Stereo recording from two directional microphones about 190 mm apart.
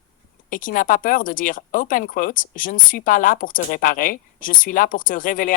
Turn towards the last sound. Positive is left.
turn(degrees=45)  # may be behind; listen again after turning